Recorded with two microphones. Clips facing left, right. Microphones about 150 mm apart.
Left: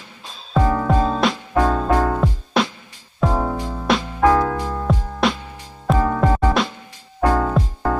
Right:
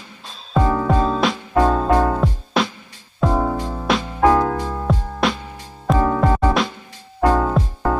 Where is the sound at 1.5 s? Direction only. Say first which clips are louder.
Right 3 dB; 15° right (ahead or behind).